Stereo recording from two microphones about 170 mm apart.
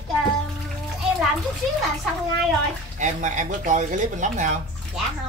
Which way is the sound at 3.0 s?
45° right (ahead or behind).